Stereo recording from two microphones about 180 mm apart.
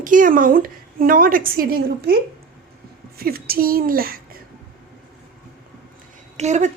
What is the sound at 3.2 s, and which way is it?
A woman's voice, 55° right (ahead or behind).